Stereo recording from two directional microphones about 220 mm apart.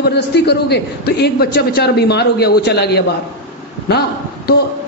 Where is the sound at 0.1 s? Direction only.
50° left (ahead or behind).